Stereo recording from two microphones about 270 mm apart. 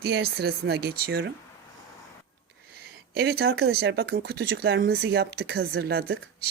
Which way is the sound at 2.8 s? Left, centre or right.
Right.